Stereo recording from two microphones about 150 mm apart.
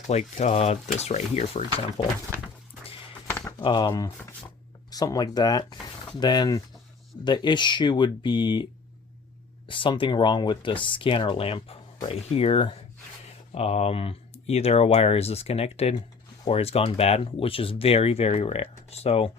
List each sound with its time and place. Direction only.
0.1 s speech: 50° left (ahead or behind)
3.2 s a sound: 15° left (ahead or behind)
3.6 s speech: 30° left (ahead or behind)
9.6 s speech: 35° left (ahead or behind)